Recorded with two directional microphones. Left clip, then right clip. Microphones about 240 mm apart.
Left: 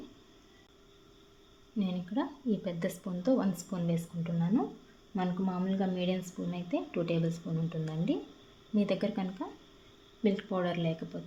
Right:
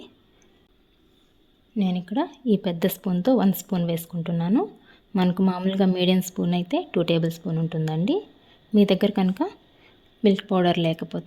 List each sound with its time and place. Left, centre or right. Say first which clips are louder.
1.8 s a woman's voice: right 9 dB; right